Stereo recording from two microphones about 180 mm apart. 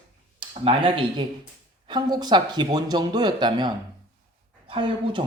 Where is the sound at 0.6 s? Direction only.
30° right (ahead or behind).